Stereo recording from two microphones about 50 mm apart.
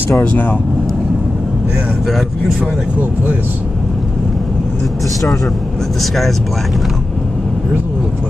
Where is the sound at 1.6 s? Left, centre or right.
Centre.